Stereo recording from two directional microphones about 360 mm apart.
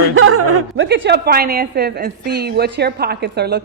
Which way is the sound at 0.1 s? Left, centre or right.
Right.